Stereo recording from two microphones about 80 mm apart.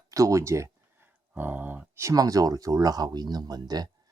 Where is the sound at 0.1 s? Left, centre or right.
Right.